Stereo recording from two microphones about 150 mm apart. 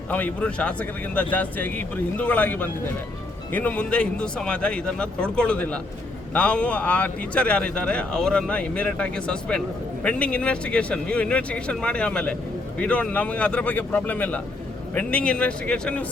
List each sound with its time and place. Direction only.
0.1 s speech: 10° left (ahead or behind)